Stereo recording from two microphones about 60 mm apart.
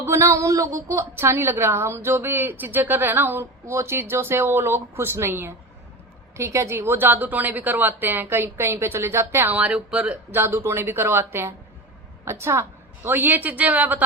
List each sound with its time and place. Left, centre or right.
0.0 s speech: right
3.7 s a woman's voice: right
9.5 s a woman's voice: right
10.3 s speech: right
13.1 s a woman's voice: right